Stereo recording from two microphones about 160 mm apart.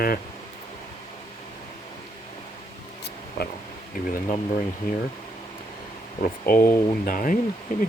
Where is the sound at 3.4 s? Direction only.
80° left.